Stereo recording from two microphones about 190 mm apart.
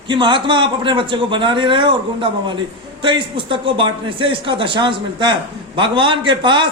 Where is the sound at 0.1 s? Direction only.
25° right (ahead or behind).